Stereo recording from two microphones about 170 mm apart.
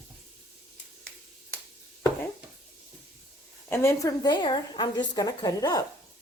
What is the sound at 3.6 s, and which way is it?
A woman's voice, 15° left (ahead or behind).